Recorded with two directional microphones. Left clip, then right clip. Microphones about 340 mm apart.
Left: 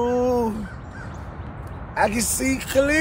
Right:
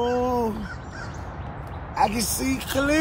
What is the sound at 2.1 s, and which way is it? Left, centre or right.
Speech, right.